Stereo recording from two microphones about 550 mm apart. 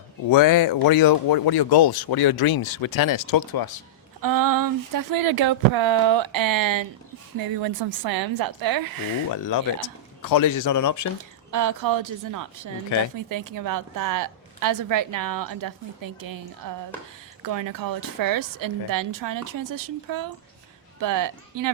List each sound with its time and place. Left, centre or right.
0.3 s speech: left
4.2 s a woman's voice: right
9.3 s speech: left
11.5 s a woman's voice: right